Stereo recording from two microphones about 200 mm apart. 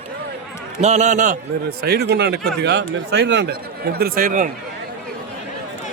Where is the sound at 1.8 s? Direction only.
55° right (ahead or behind).